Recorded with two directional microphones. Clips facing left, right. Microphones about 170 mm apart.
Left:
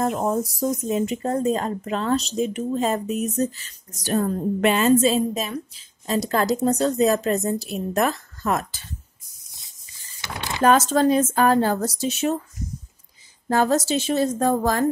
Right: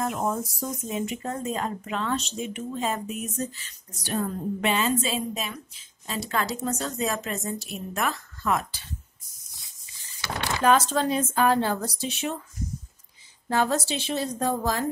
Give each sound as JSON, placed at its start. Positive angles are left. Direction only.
{"t": 0.0, "sound": "speech", "side_deg": 35}
{"t": 10.2, "sound": "a sound", "side_deg": 20}
{"t": 10.9, "sound": "a woman's voice", "side_deg": 45}
{"t": 13.5, "sound": "a woman's voice", "side_deg": 45}